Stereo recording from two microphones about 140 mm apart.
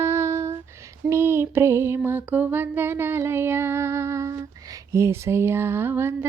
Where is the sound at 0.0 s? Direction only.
20° right (ahead or behind).